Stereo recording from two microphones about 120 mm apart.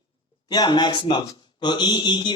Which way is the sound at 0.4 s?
35° left (ahead or behind).